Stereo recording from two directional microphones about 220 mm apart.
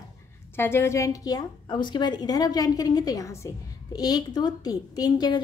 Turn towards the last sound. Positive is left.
turn(degrees=15)  # may be behind; listen again after turning